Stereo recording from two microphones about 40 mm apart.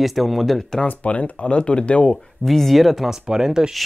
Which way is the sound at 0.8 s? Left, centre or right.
Left.